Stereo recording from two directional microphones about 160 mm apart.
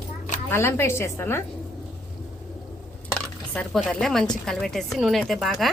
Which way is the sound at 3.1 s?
5° left (ahead or behind).